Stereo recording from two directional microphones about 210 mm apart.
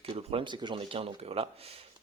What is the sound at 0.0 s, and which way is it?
Speech, 25° right (ahead or behind).